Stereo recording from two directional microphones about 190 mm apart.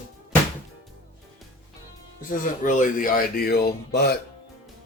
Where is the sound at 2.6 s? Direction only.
40° left (ahead or behind).